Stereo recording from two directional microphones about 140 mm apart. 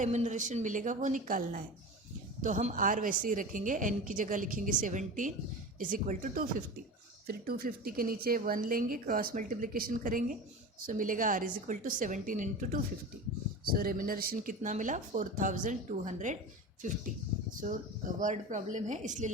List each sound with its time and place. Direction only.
0.0 s a woman's voice: 60° right (ahead or behind); by 1.6 s 75° right (ahead or behind)
2.4 s a woman's voice: 60° right (ahead or behind)
13.7 s a woman's voice: 90° right; by 16.4 s 60° right (ahead or behind)
17.5 s a woman's voice: 70° right (ahead or behind)